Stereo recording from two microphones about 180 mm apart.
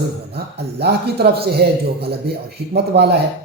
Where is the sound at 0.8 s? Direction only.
65° right (ahead or behind).